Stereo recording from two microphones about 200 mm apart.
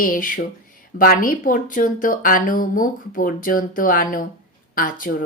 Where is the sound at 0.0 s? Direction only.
45° left (ahead or behind).